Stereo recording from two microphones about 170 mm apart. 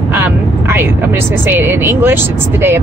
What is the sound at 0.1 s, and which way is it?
Vehicle, 10° right (ahead or behind).